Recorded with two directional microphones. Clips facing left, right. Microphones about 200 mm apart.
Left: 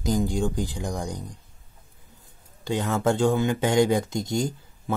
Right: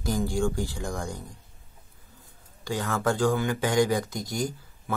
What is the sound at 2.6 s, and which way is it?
Speech, 20° left (ahead or behind).